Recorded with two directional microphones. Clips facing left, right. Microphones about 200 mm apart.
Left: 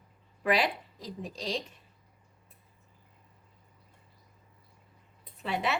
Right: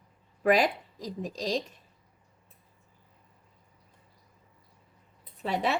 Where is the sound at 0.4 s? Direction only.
45° right (ahead or behind).